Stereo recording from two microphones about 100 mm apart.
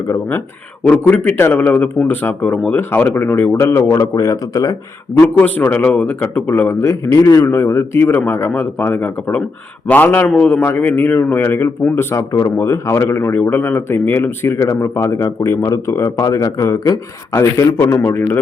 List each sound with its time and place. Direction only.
0.1 s a man's voice: 25° left (ahead or behind)
5.2 s a man's voice: 15° left (ahead or behind)